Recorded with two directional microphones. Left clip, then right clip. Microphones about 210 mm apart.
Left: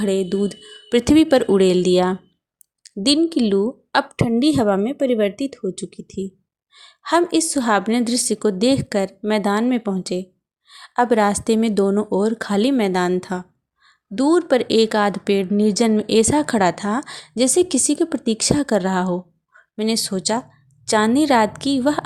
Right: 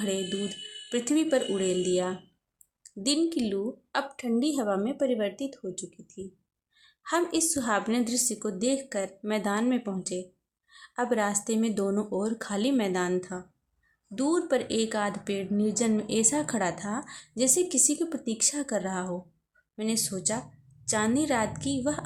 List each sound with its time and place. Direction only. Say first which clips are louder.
0.0 s speech: left 11 dB; 35° left (ahead or behind)